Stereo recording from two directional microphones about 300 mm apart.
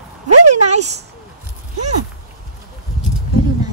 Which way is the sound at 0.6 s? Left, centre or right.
Right.